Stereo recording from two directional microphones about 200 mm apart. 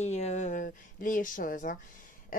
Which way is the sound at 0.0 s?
35° left (ahead or behind).